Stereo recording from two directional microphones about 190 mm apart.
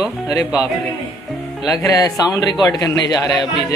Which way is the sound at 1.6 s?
20° left (ahead or behind).